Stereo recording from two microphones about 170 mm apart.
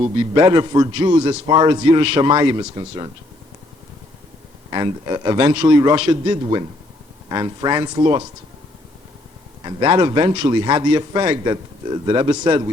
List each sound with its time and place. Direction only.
0.0 s a man's voice: 25° right (ahead or behind)
4.7 s a man's voice: 25° right (ahead or behind)
9.6 s a man's voice: 25° right (ahead or behind)